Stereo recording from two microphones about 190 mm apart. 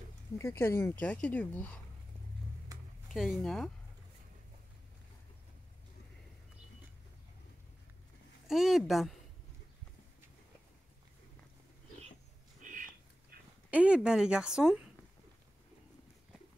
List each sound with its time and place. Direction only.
0.4 s speech: 15° left (ahead or behind)
3.1 s a woman's voice: centre (ahead or behind)
8.5 s a woman's voice: centre (ahead or behind)
12.6 s a sound: 40° right (ahead or behind)
13.7 s a woman's voice: 5° right (ahead or behind)